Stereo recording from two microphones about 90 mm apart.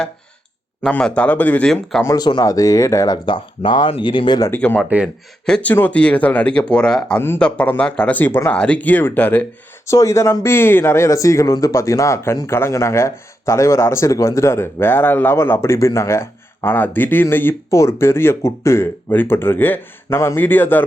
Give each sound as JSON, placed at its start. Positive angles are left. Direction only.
{"t": 0.9, "sound": "speech", "side_deg": 10}
{"t": 2.1, "sound": "speech", "side_deg": 50}
{"t": 3.2, "sound": "speech", "side_deg": 65}
{"t": 4.5, "sound": "speech", "side_deg": 20}
{"t": 9.8, "sound": "speech", "side_deg": 35}